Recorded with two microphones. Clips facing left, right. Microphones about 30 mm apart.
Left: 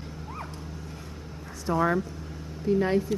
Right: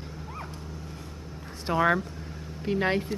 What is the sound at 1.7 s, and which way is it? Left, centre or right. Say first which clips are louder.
A woman's voice: right 1 dB; right.